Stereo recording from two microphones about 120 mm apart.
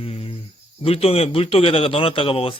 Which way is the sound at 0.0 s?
55° left (ahead or behind).